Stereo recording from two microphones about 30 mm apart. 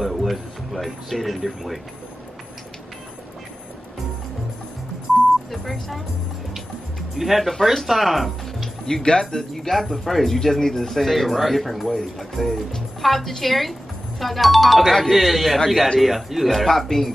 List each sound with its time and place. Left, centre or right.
0.0 s a sound: centre
1.2 s speech: centre
5.5 s speech: centre
7.2 s speech: centre
8.8 s speech: left; by 17.1 s centre